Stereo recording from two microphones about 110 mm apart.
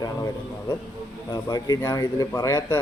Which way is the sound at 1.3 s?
35° left (ahead or behind).